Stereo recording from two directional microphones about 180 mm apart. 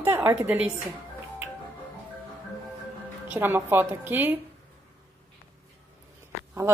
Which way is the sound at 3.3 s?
10° right (ahead or behind).